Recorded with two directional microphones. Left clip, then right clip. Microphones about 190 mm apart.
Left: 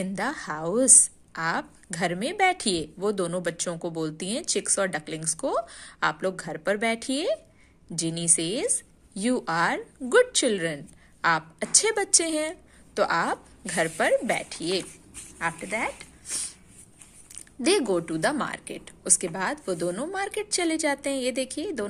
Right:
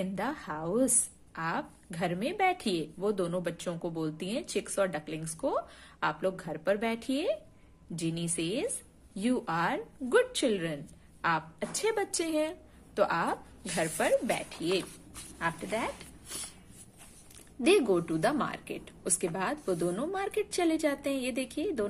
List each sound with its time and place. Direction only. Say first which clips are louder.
0.0 s a woman's voice: left 5 dB; 20° left (ahead or behind)
17.6 s a woman's voice: left 2 dB; 15° left (ahead or behind)